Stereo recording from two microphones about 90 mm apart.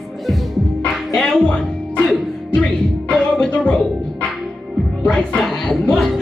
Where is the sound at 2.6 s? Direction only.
10° left (ahead or behind).